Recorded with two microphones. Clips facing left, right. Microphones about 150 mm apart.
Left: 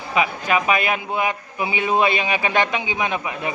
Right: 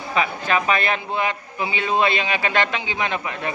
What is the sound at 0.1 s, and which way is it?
A man's voice, 10° left (ahead or behind).